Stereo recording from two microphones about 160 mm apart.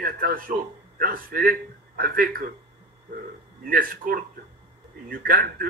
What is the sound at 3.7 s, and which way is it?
A man's voice, 65° right (ahead or behind).